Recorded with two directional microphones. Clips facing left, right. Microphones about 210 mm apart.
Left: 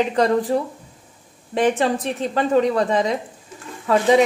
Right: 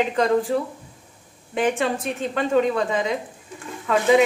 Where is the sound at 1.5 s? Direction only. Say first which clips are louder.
Left 3 dB; 35° left (ahead or behind).